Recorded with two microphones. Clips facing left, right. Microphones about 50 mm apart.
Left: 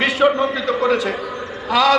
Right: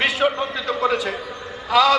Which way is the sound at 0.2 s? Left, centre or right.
Left.